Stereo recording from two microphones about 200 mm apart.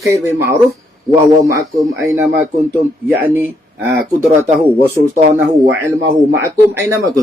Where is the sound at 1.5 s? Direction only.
15° right (ahead or behind).